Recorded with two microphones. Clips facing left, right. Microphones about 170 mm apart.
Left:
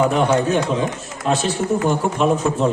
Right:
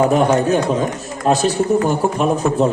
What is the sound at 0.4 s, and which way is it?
A man's voice, 40° right (ahead or behind).